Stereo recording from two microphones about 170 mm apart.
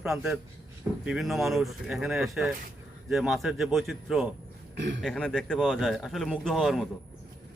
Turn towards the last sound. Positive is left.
turn(degrees=0)  # may be behind; listen again after turning